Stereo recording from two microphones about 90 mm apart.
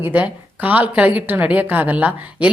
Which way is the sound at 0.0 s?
20° right (ahead or behind).